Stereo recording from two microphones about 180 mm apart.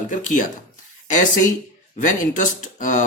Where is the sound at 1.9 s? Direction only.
45° left (ahead or behind).